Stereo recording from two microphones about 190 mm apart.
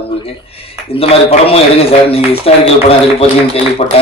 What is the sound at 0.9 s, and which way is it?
A man's voice, 30° left (ahead or behind).